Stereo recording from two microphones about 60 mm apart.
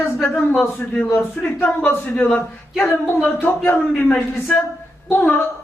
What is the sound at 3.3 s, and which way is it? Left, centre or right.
Speech, left.